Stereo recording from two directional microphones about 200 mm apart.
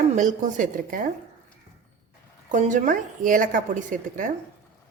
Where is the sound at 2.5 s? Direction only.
40° right (ahead or behind).